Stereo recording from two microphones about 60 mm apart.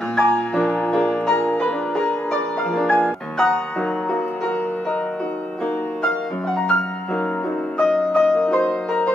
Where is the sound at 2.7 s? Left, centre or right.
Centre.